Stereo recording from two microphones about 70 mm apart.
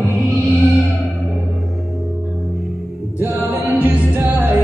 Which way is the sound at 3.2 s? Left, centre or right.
Right.